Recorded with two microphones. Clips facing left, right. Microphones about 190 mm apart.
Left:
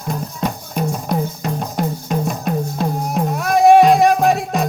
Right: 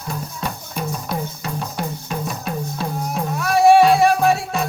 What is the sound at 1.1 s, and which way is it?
Music, 45° left (ahead or behind).